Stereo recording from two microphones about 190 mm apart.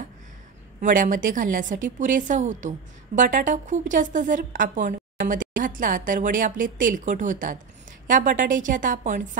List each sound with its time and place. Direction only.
0.7 s a woman's voice: 45° right (ahead or behind)